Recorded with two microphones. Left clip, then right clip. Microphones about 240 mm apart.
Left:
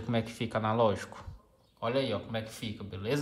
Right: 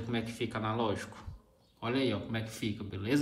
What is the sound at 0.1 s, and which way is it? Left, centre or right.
Speech, left.